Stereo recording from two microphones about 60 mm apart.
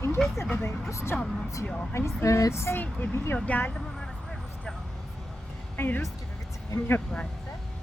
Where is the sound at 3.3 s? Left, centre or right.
Left.